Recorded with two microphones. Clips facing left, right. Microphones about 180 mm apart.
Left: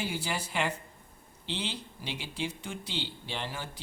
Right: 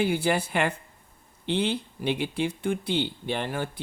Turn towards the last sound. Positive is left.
turn(degrees=-55)  # may be behind; listen again after turning